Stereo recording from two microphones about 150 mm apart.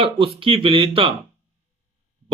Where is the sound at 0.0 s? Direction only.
35° right (ahead or behind).